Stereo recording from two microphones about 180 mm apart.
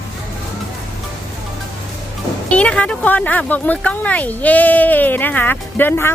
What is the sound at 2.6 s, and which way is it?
Speech, 5° left (ahead or behind).